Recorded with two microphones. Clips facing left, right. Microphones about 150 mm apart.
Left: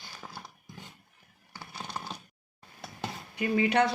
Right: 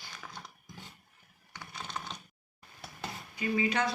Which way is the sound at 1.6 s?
35° left (ahead or behind).